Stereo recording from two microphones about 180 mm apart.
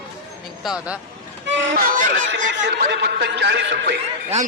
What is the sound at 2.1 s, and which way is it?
Speech, 90° right.